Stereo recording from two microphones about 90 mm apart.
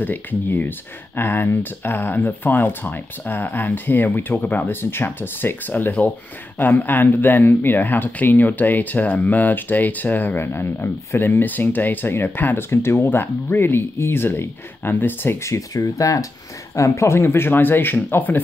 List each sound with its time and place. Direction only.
0.0 s speech: 20° left (ahead or behind)